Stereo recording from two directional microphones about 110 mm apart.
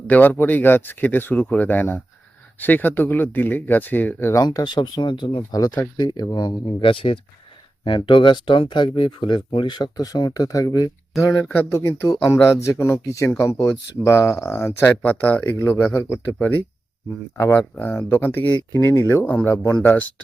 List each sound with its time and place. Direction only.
0.1 s speech: 15° left (ahead or behind)
4.4 s speech: 35° left (ahead or behind)
5.4 s speech: 35° left (ahead or behind)
17.3 s speech: 25° left (ahead or behind)